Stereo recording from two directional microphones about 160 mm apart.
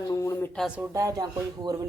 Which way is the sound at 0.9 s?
20° right (ahead or behind).